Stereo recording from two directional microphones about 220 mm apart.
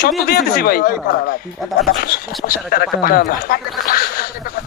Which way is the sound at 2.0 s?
40° left (ahead or behind).